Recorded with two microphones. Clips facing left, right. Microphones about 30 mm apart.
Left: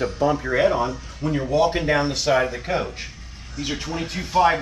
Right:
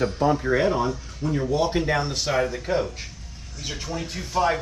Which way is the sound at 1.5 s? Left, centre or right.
Left.